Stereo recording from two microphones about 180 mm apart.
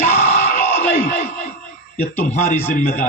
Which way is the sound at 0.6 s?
10° left (ahead or behind).